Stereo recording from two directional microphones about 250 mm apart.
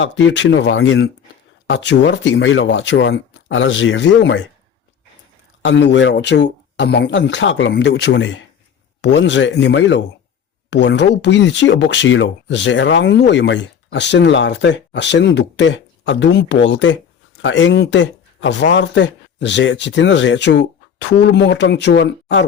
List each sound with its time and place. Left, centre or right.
0.0 s speech: left
5.6 s speech: left